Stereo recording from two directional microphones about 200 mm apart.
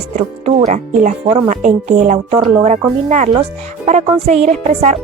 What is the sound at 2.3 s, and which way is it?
A woman's voice, 25° right (ahead or behind).